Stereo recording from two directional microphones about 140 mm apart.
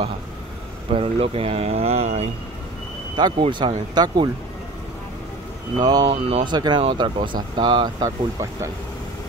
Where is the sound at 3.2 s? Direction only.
30° right (ahead or behind).